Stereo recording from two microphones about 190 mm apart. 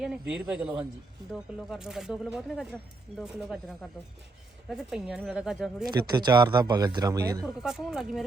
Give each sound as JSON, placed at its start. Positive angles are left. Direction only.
{"t": 0.0, "sound": "speech", "side_deg": -5}
{"t": 5.8, "sound": "speech", "side_deg": -20}
{"t": 7.4, "sound": "speech", "side_deg": 0}